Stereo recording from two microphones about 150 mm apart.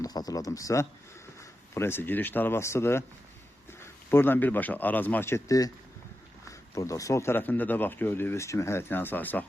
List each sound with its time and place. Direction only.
0.0 s speech: 25° left (ahead or behind)